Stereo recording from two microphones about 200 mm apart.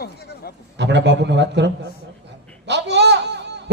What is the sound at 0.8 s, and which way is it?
Speech, 60° right (ahead or behind).